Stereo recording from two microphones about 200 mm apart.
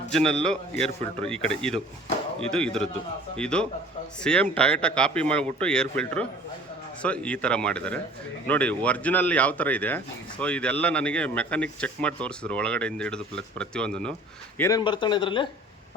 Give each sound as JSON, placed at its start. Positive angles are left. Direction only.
{"t": 0.1, "sound": "speech", "side_deg": 5}
{"t": 14.6, "sound": "speech", "side_deg": 20}